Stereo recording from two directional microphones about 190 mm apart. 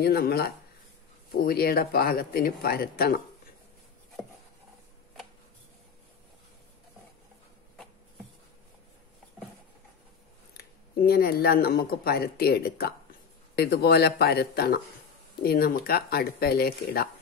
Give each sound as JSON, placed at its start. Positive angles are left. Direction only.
{"t": 0.0, "sound": "a man's voice", "side_deg": 55}
{"t": 10.5, "sound": "a man's voice", "side_deg": 55}